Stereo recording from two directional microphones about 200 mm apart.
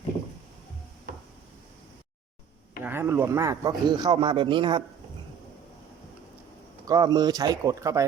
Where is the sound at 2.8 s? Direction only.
10° right (ahead or behind).